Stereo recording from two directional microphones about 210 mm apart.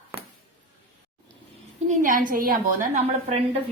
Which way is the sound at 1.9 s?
40° right (ahead or behind).